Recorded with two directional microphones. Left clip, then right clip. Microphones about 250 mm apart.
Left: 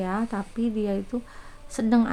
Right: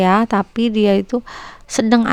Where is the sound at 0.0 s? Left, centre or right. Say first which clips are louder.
Right 15 dB; right.